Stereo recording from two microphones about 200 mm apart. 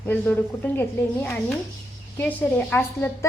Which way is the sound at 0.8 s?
10° left (ahead or behind).